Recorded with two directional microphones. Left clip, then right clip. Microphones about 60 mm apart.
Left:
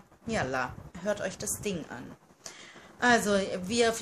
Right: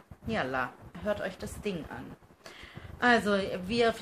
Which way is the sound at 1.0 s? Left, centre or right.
Left.